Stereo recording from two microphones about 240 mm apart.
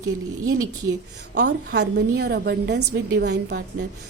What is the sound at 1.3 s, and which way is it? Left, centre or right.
A woman's voice, right.